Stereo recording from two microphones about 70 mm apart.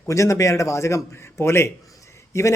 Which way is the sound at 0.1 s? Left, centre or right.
Left.